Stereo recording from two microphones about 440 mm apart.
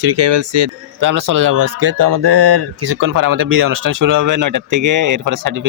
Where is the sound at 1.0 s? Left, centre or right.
Right.